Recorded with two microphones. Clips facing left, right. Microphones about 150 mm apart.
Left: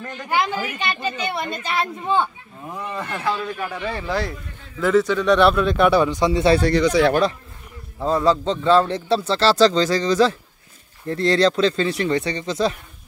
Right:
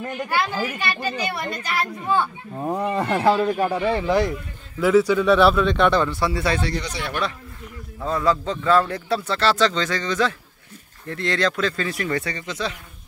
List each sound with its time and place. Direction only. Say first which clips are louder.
0.0 s speech: right 5 dB; 15° right (ahead or behind)
0.3 s a child's voice: left 3 dB; 20° left (ahead or behind)
2.5 s speech: right 7 dB; 50° right (ahead or behind); by 3.8 s 30° right (ahead or behind)
3.8 s speech: right 3 dB; 20° right (ahead or behind)
4.7 s speech: right 1 dB; 5° right (ahead or behind); by 6.5 s 20° left (ahead or behind)
6.7 s speech: left 12 dB; 80° left
8.0 s a child's voice: left 3 dB; 30° left (ahead or behind)